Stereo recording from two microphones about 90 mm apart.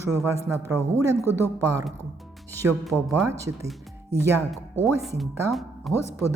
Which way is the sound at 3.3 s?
35° right (ahead or behind).